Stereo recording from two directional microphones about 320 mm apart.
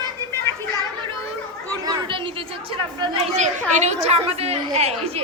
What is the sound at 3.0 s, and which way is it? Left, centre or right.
A woman's voice, centre.